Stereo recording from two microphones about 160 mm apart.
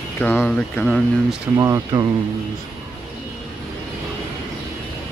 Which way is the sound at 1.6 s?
20° right (ahead or behind).